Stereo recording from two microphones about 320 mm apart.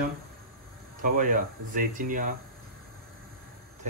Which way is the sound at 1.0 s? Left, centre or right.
Right.